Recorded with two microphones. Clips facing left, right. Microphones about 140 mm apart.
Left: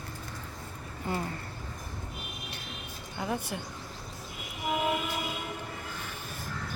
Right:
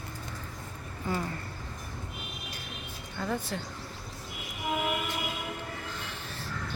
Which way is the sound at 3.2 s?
15° left (ahead or behind).